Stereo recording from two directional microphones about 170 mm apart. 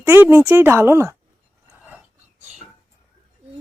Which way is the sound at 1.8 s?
10° right (ahead or behind).